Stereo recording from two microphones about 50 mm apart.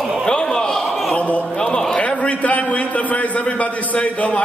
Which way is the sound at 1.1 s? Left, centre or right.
Left.